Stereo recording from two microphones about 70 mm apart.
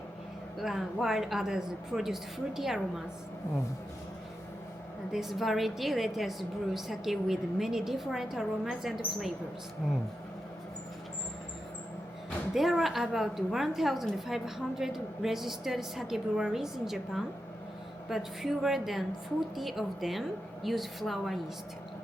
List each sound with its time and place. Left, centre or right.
0.6 s a woman's voice: centre
5.1 s a woman's voice: centre
12.5 s a woman's voice: centre